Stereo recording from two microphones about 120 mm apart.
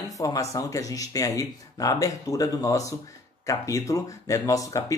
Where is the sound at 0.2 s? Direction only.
30° left (ahead or behind).